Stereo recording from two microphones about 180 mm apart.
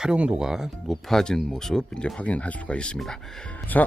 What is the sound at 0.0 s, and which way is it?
Speech, 5° right (ahead or behind).